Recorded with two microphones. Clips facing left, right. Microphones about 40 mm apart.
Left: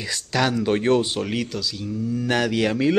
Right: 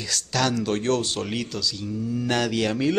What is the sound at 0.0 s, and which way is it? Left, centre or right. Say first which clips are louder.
A man's voice: left 2 dB; centre.